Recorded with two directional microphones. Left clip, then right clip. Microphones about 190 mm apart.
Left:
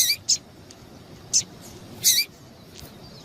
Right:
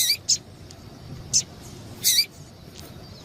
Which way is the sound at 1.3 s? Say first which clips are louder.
Even; centre (ahead or behind).